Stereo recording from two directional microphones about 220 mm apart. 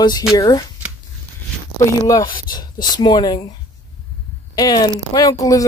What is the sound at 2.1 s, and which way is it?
Speech, 20° left (ahead or behind).